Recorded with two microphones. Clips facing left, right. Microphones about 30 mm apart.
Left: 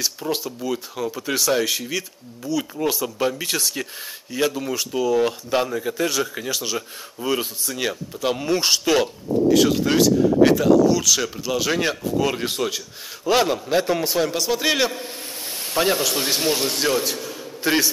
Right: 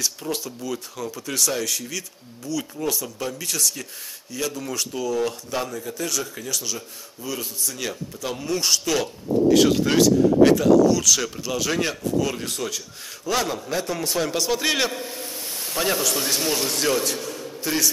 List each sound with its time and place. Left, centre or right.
0.3 s speech: centre; by 7.4 s left
7.6 s speech: left
9.5 s speech: centre; by 14.0 s left
14.0 s speech: centre
15.6 s speech: centre